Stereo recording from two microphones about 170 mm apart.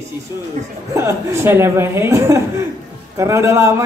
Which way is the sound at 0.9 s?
15° right (ahead or behind).